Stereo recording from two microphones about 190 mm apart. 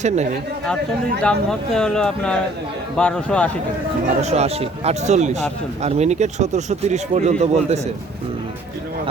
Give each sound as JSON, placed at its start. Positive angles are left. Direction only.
{"t": 1.2, "sound": "speech", "side_deg": 5}
{"t": 4.2, "sound": "speech", "side_deg": -35}